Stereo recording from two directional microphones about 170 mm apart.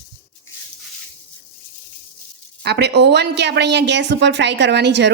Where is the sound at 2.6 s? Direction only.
75° right (ahead or behind).